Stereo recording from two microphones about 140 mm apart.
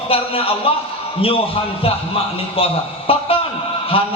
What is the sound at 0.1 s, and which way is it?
Speech, 40° left (ahead or behind).